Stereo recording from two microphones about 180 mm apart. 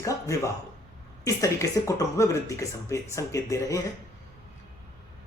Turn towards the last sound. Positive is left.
turn(degrees=15)  # may be behind; listen again after turning